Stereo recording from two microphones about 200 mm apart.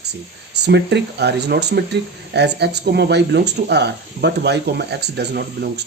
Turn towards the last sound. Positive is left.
turn(degrees=-55)  # may be behind; listen again after turning